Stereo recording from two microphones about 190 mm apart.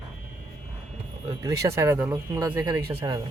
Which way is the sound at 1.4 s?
15° right (ahead or behind).